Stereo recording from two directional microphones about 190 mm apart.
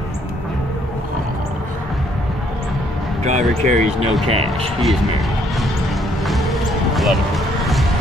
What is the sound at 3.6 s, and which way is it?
Speech, 40° right (ahead or behind).